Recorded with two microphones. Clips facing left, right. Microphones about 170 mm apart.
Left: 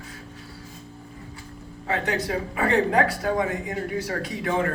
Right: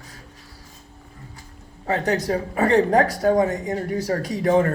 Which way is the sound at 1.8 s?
40° right (ahead or behind).